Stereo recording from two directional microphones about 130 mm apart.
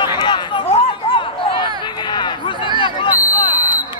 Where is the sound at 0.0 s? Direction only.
35° left (ahead or behind).